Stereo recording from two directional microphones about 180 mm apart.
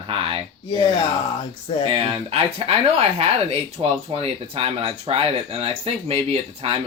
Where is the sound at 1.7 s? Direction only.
30° left (ahead or behind).